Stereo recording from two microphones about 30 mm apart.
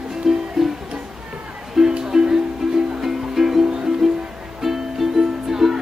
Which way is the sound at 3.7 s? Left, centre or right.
Right.